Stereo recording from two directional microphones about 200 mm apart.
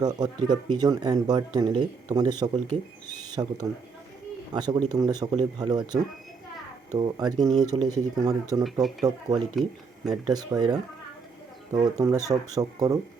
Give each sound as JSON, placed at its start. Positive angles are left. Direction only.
{"t": 0.0, "sound": "speech", "side_deg": -20}
{"t": 8.6, "sound": "speech", "side_deg": 0}
{"t": 10.1, "sound": "speech", "side_deg": -20}